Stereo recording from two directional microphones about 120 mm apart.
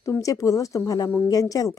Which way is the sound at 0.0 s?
25° left (ahead or behind).